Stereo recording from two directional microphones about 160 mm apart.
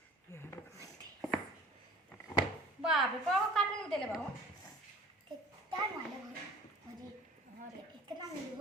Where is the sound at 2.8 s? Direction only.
Centre (ahead or behind).